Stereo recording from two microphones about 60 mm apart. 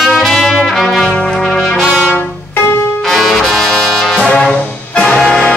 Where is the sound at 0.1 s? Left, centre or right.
Centre.